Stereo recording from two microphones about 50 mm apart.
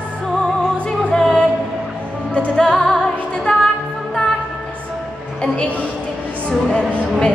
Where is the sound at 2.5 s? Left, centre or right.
Centre.